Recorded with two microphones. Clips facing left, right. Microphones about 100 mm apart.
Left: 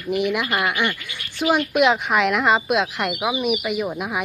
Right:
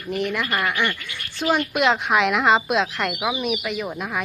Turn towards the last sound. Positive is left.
turn(degrees=10)  # may be behind; listen again after turning